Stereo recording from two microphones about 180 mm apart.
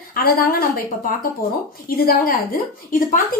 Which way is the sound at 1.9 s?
55° left (ahead or behind).